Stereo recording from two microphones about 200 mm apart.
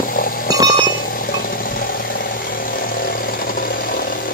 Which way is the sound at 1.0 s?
45° left (ahead or behind).